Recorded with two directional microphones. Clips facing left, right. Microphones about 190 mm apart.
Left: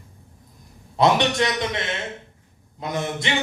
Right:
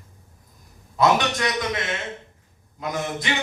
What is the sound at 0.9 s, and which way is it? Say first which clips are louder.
Speech: left 2 dB; 25° left (ahead or behind).